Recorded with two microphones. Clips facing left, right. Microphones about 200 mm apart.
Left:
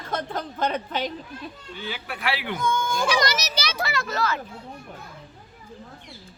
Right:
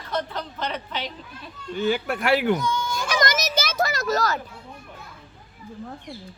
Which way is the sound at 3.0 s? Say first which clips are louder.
Right 2 dB; 50° right (ahead or behind).